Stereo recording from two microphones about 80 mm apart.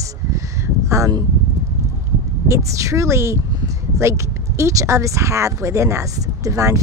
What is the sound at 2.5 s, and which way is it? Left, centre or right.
Speech, right.